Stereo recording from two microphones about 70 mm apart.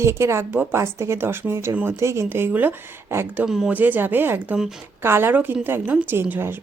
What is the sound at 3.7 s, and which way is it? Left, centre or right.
A woman's voice, right.